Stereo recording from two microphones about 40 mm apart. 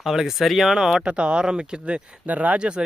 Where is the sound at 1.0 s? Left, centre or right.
Right.